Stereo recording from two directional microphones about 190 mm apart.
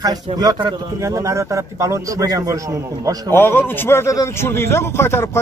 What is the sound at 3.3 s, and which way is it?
A man's voice, 10° left (ahead or behind).